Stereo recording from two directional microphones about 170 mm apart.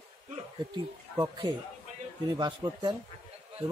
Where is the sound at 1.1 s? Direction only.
25° right (ahead or behind).